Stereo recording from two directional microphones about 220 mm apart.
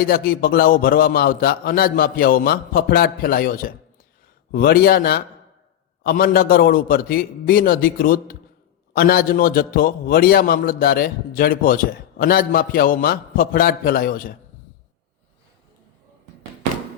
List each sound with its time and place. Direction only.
0.1 s a man's voice: 40° left (ahead or behind)